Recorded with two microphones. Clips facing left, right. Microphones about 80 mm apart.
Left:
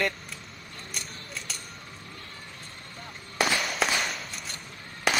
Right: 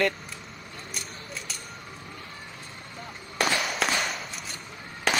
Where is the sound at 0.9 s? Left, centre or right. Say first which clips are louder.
Even; centre.